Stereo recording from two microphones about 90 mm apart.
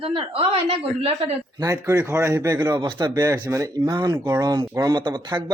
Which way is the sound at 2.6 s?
50° right (ahead or behind).